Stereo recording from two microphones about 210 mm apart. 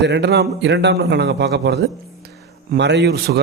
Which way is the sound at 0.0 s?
55° right (ahead or behind).